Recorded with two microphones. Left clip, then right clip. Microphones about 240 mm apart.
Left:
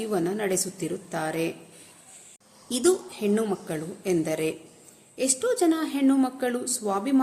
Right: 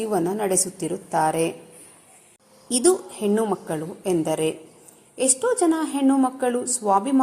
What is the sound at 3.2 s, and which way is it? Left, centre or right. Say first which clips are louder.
A woman's voice: right 4 dB; centre.